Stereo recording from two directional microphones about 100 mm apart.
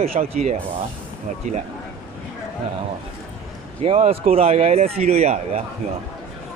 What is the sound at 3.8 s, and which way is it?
Speech, 90° right.